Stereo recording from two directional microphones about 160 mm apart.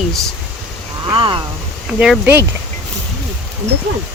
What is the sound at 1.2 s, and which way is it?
Speech, 30° right (ahead or behind).